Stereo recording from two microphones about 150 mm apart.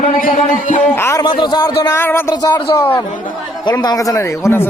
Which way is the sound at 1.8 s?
20° left (ahead or behind).